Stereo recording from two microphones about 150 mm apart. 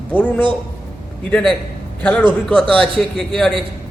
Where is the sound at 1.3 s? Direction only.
5° left (ahead or behind).